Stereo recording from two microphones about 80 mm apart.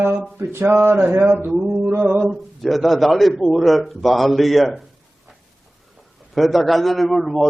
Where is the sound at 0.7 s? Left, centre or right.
Right.